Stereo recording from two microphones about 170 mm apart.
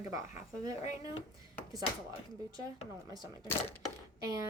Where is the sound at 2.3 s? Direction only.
20° right (ahead or behind).